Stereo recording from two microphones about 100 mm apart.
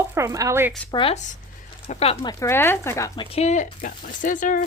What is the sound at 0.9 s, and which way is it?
Speech, 60° left (ahead or behind).